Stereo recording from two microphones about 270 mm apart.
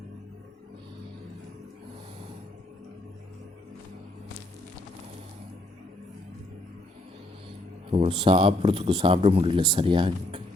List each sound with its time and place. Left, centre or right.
7.9 s a man's voice: centre